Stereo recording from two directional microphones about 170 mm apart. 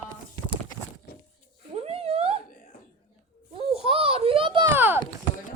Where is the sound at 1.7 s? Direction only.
35° right (ahead or behind).